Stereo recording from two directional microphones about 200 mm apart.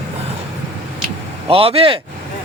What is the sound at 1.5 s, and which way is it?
Speech, 30° right (ahead or behind).